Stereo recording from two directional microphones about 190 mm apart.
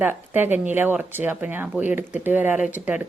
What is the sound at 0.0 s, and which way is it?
Speech, 10° right (ahead or behind).